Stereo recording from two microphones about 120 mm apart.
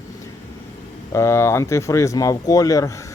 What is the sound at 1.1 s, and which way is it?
Speech, 20° left (ahead or behind).